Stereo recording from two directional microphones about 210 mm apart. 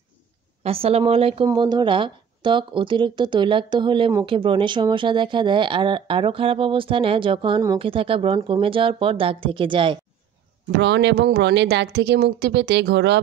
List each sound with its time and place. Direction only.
0.7 s speech: 30° right (ahead or behind)
10.8 s speech: 55° right (ahead or behind)